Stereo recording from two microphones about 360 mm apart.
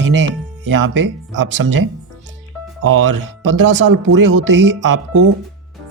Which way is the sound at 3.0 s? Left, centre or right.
Right.